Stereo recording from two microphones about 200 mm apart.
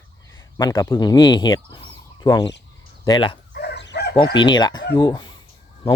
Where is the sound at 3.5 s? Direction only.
55° left (ahead or behind).